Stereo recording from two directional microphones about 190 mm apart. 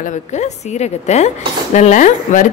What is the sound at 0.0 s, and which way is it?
Speech, 35° left (ahead or behind).